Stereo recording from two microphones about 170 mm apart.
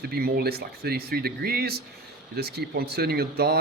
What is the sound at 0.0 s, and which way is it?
Speech, 65° right (ahead or behind).